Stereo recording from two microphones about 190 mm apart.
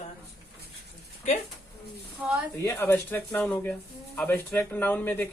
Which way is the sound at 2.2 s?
5° right (ahead or behind).